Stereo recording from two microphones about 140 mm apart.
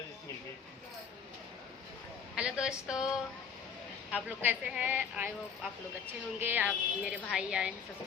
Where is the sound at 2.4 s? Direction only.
5° right (ahead or behind).